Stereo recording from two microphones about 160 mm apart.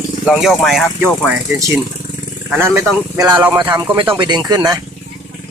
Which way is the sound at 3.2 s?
15° right (ahead or behind).